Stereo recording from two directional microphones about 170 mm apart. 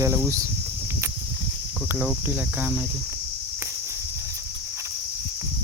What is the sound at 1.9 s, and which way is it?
Cricket, 10° right (ahead or behind).